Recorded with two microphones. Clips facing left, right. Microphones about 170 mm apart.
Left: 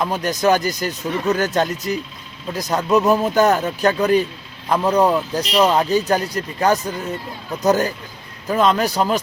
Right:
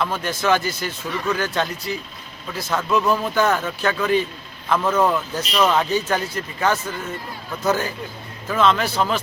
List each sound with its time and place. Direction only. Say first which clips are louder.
0.0 s a man's voice: left 4 dB; 40° left (ahead or behind)